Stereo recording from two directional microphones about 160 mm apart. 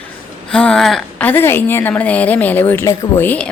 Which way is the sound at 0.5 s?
5° left (ahead or behind).